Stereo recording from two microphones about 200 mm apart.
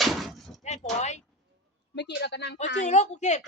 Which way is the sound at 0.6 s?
35° left (ahead or behind).